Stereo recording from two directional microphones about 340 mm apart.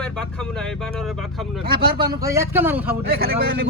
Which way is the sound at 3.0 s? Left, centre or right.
Right.